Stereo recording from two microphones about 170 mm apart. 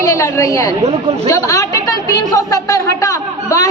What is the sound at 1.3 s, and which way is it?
A woman's voice, 20° left (ahead or behind).